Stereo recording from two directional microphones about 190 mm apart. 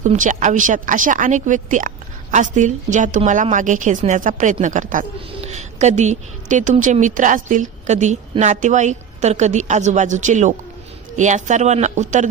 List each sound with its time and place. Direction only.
0.0 s a woman's voice: 40° right (ahead or behind)